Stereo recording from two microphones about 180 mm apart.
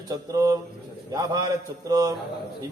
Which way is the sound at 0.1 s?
20° right (ahead or behind).